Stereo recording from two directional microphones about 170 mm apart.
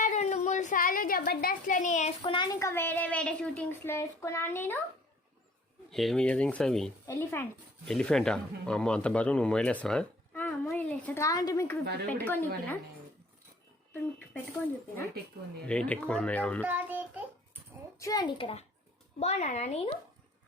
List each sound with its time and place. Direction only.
0.0 s a sound: 45° left (ahead or behind)
2.3 s speech: 25° left (ahead or behind)
5.9 s speech: centre (ahead or behind)
15.6 s speech: 5° left (ahead or behind)
16.6 s child singing: 10° right (ahead or behind)
18.0 s a child's voice: 20° left (ahead or behind); by 19.9 s 40° left (ahead or behind)